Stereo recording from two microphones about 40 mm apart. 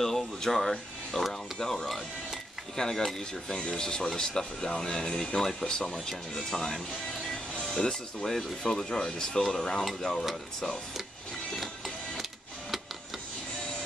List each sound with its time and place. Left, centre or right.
0.0 s speech: centre
3.5 s speech: left